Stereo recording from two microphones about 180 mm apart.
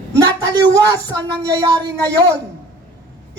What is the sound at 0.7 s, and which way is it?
Speech, 20° right (ahead or behind).